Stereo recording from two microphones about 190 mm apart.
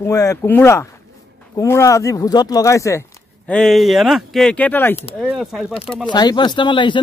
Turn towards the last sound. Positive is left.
turn(degrees=25)  # may be behind; listen again after turning